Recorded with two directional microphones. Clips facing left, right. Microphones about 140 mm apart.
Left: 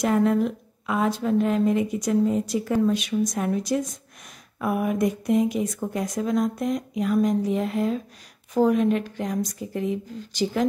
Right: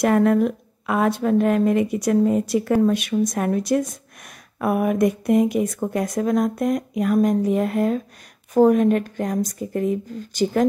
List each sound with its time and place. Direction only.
0.0 s a woman's voice: 60° right (ahead or behind)